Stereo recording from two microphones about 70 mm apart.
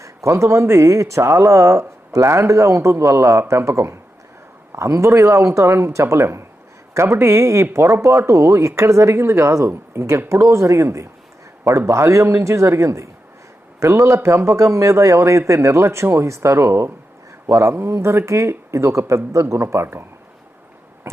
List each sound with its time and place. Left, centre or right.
0.0 s speech: right